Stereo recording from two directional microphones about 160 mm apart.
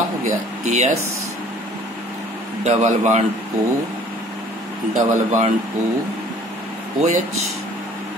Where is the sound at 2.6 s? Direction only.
45° right (ahead or behind).